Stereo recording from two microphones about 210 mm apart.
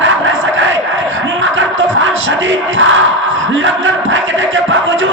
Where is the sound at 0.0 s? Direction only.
65° right (ahead or behind).